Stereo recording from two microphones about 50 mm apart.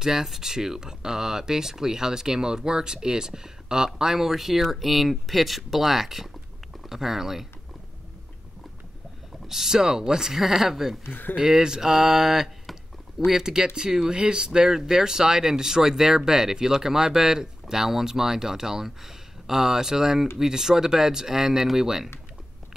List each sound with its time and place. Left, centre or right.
0.0 s speech: centre
9.5 s speech: centre
11.1 s speech: left
11.3 s speech: centre